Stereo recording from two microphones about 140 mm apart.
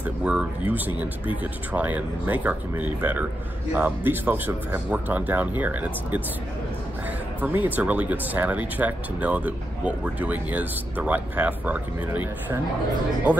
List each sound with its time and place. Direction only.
0.0 s speech: 5° right (ahead or behind)
7.4 s speech: 10° right (ahead or behind)